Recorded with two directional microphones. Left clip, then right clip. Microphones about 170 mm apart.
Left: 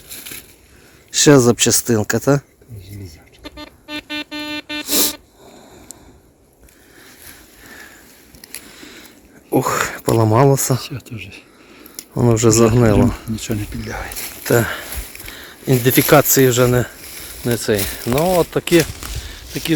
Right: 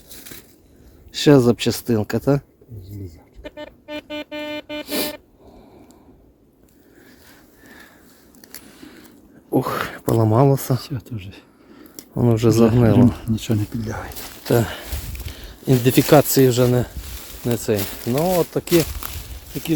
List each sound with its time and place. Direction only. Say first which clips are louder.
1.1 s speech: left 3 dB; 5° right (ahead or behind)
3.9 s music: left 3 dB; 30° right (ahead or behind)
4.9 s a sound: left 6 dB; centre (ahead or behind)
9.5 s a sound: left 4 dB; 10° right (ahead or behind)
10.8 s speech: left 3 dB; 50° right (ahead or behind)
12.1 s speech: left 3 dB; 10° right (ahead or behind)
13.3 s speech: even; 75° right (ahead or behind)
14.4 s speech: left 3 dB; 20° right (ahead or behind)
15.4 s a sound: left 2 dB; 25° right (ahead or behind)
15.8 s speech: left 2 dB; 25° right (ahead or behind)
17.2 s speech: left 3 dB; 5° right (ahead or behind)